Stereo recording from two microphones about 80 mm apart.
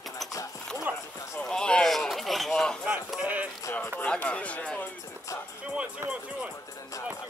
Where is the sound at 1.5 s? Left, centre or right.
Centre.